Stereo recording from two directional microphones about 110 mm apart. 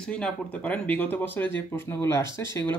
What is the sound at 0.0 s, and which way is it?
Speech, 10° left (ahead or behind).